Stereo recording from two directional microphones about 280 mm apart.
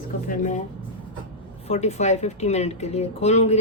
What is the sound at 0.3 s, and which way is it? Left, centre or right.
Speech, left.